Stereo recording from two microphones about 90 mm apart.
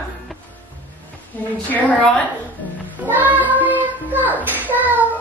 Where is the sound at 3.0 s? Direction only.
20° right (ahead or behind).